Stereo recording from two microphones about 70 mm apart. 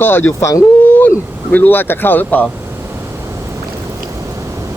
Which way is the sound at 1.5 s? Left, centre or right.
Left.